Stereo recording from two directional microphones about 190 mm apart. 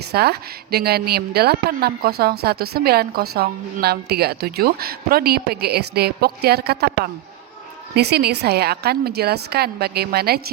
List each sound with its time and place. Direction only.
0.1 s a woman's voice: 55° right (ahead or behind)